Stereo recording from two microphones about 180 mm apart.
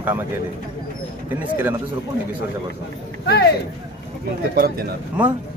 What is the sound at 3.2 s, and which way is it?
Speech, 65° left (ahead or behind).